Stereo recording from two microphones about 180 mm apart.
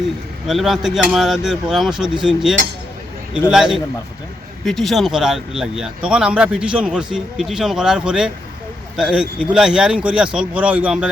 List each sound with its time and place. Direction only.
0.4 s speech: centre (ahead or behind)